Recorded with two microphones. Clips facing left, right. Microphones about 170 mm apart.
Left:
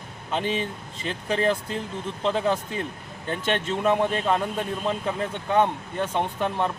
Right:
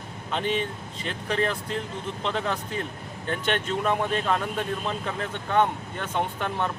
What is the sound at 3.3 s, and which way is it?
Speech, 25° left (ahead or behind).